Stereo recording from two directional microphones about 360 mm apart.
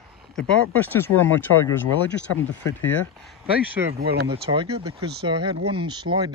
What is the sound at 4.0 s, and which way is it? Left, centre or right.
Speech, right.